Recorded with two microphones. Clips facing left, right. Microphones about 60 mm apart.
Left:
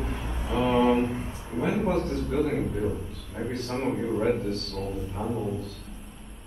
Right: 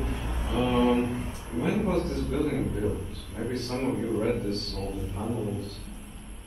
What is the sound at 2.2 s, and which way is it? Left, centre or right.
Speech, left.